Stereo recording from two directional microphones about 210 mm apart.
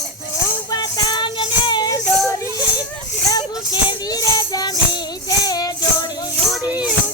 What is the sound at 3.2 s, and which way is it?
Music, 20° left (ahead or behind).